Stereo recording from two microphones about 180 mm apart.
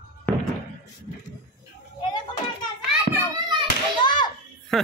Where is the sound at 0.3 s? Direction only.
10° left (ahead or behind).